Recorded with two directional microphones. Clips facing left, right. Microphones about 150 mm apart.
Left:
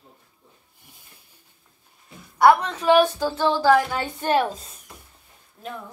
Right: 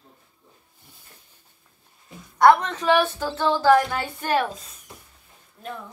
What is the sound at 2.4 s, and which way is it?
A woman's voice, 10° left (ahead or behind).